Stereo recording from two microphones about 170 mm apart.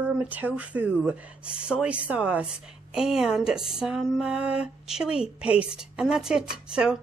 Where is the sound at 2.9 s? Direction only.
5° right (ahead or behind).